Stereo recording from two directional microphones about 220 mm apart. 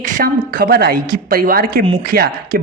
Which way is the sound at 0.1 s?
40° right (ahead or behind).